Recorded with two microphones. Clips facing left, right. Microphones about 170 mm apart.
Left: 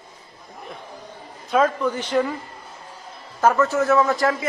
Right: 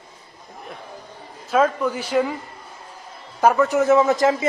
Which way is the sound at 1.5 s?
10° right (ahead or behind).